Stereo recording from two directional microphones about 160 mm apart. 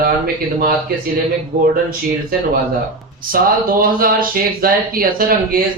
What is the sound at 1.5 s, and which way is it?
Speech, 60° right (ahead or behind).